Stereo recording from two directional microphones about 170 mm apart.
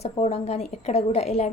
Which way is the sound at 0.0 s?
40° left (ahead or behind).